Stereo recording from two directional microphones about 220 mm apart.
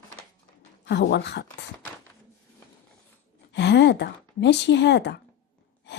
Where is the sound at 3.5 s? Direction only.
50° left (ahead or behind).